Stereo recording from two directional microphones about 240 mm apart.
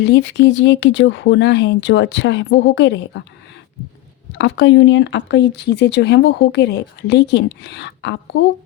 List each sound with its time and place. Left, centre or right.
0.0 s speech: left
4.4 s speech: left